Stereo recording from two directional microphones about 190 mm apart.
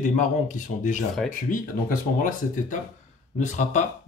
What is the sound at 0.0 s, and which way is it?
Speech, 40° left (ahead or behind).